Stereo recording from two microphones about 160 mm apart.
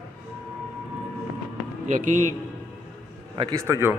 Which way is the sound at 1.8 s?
50° right (ahead or behind).